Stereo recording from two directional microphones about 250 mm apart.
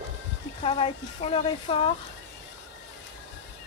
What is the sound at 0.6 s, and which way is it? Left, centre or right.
Speech, left.